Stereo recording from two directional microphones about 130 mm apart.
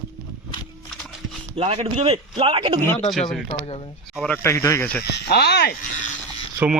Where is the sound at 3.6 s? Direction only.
50° left (ahead or behind).